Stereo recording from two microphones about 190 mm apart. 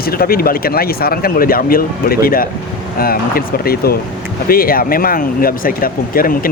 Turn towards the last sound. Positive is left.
turn(degrees=50)  # may be behind; listen again after turning